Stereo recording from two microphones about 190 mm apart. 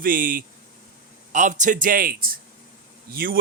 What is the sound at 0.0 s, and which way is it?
A man's voice, 45° right (ahead or behind).